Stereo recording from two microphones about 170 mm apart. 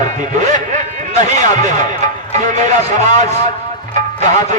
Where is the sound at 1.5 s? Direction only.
45° right (ahead or behind).